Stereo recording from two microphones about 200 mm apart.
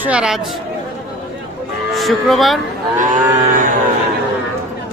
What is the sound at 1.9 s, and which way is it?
Speech, centre (ahead or behind).